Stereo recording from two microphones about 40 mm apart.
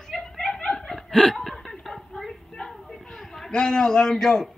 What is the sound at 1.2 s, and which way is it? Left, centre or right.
Speech, left.